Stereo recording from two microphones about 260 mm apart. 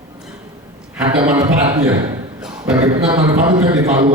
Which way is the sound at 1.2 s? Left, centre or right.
Centre.